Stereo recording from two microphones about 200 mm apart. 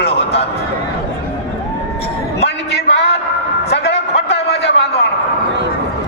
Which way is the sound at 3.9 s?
30° left (ahead or behind).